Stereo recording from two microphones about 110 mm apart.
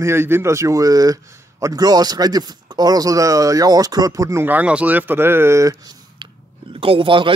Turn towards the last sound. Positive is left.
turn(degrees=-50)  # may be behind; listen again after turning